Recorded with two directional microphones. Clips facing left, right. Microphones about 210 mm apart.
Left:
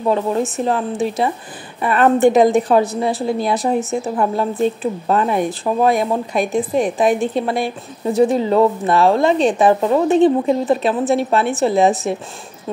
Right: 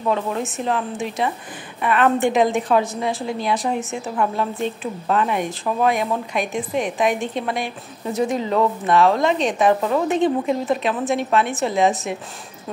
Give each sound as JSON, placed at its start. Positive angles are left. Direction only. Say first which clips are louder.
{"t": 0.0, "sound": "a woman's voice", "louder": "left 5 dB", "side_deg": 35}